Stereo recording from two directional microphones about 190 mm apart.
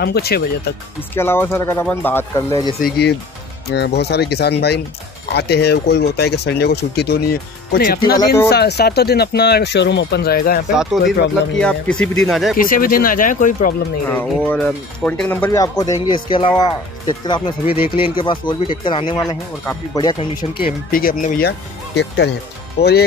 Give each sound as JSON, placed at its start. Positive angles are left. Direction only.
{"t": 0.0, "sound": "speech", "side_deg": 55}
{"t": 1.1, "sound": "speech", "side_deg": 10}
{"t": 2.8, "sound": "speech", "side_deg": 60}
{"t": 8.0, "sound": "speech", "side_deg": 20}
{"t": 8.5, "sound": "speech", "side_deg": 60}
{"t": 10.8, "sound": "speech", "side_deg": 0}
{"t": 12.5, "sound": "speech", "side_deg": 45}
{"t": 14.0, "sound": "speech", "side_deg": 10}
{"t": 15.8, "sound": "speech", "side_deg": 20}
{"t": 20.9, "sound": "speech", "side_deg": 45}